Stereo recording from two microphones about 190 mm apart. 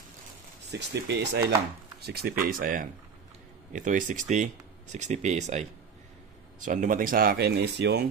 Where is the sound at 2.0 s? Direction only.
55° right (ahead or behind).